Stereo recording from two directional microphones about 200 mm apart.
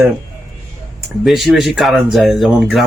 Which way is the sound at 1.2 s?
Centre (ahead or behind).